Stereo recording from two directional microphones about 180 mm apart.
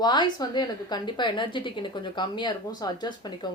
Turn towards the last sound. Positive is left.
turn(degrees=25)  # may be behind; listen again after turning